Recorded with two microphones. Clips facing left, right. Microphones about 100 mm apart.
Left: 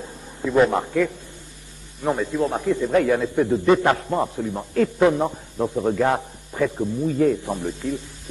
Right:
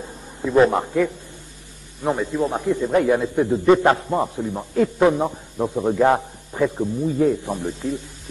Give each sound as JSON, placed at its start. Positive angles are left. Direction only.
{"t": 0.0, "sound": "a sound", "side_deg": -10}
{"t": 0.7, "sound": "a man's voice", "side_deg": -20}
{"t": 4.1, "sound": "a man's voice", "side_deg": -10}